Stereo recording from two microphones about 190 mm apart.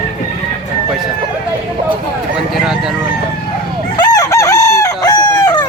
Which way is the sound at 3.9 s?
20° left (ahead or behind).